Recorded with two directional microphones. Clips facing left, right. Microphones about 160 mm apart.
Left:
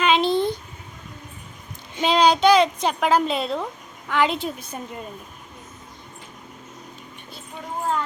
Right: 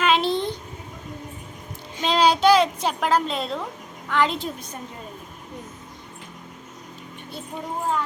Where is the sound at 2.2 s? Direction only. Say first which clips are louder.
Left 1 dB; 5° right (ahead or behind).